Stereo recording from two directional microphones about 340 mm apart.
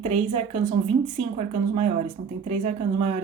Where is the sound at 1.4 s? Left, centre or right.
Centre.